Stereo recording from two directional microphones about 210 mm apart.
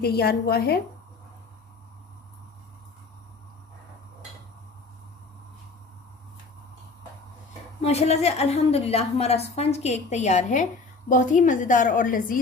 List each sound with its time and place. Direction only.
0.0 s a woman's voice: 50° left (ahead or behind)
7.8 s a woman's voice: 30° left (ahead or behind)